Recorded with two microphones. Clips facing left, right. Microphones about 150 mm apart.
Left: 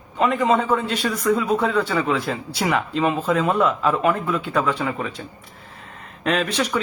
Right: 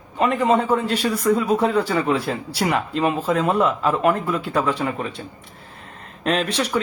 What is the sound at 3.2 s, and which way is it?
Speech, 35° right (ahead or behind).